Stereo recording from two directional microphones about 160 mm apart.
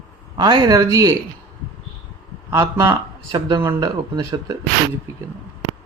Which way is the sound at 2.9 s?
30° right (ahead or behind).